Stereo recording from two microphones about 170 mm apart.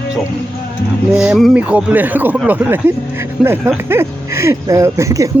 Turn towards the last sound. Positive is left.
turn(degrees=-20)  # may be behind; listen again after turning